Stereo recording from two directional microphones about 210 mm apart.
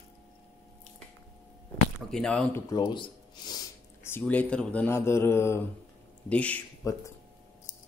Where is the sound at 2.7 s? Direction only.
20° left (ahead or behind).